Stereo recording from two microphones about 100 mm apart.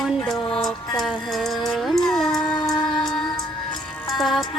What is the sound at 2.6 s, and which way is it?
Music, 50° left (ahead or behind).